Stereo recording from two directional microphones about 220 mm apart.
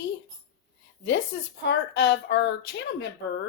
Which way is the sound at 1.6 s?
50° left (ahead or behind).